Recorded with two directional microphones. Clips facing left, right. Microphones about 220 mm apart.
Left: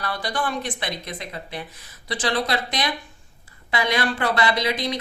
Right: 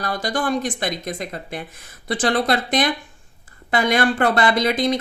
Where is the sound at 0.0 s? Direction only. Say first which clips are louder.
Right 4 dB; 45° right (ahead or behind).